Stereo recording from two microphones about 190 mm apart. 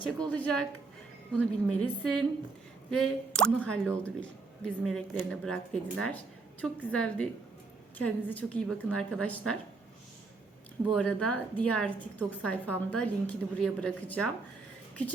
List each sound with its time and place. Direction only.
0.2 s a woman's voice: 5° left (ahead or behind)
10.9 s a woman's voice: 5° left (ahead or behind)